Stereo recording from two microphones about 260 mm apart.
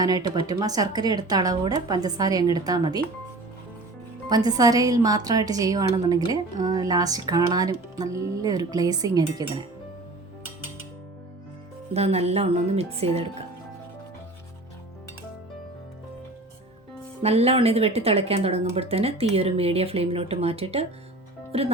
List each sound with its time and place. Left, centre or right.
0.0 s speech: centre
4.3 s speech: centre
11.9 s speech: right
17.2 s speech: right